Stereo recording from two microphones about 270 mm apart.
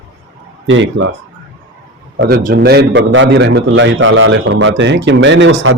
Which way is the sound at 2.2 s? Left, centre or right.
Right.